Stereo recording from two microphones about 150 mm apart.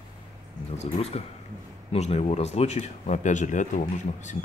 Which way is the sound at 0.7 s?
45° left (ahead or behind).